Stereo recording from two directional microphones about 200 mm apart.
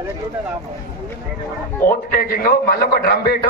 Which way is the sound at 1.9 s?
45° left (ahead or behind).